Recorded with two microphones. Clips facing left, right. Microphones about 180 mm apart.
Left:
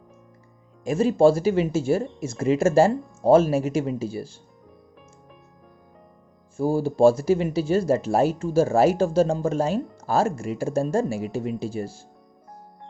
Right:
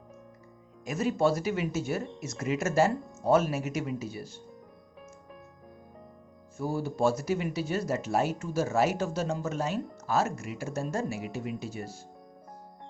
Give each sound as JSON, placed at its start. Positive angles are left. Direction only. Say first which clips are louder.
{"t": 0.9, "sound": "speech", "louder": "left 9 dB", "side_deg": 30}
{"t": 6.6, "sound": "speech", "louder": "left 10 dB", "side_deg": 30}